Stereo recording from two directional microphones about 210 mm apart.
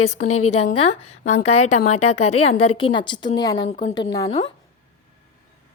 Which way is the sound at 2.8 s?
20° left (ahead or behind).